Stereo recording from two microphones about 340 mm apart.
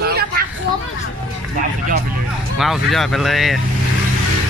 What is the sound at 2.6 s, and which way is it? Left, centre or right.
Speech, centre.